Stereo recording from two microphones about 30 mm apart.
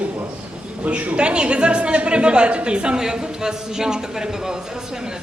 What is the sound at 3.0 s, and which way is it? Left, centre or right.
A man's voice, right.